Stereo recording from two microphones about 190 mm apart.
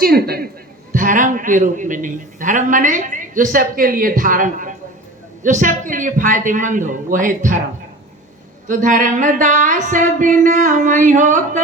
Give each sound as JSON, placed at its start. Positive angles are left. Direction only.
{"t": 0.0, "sound": "a man's voice", "side_deg": -55}
{"t": 0.9, "sound": "a man's voice", "side_deg": -45}
{"t": 8.6, "sound": "a man's voice", "side_deg": -45}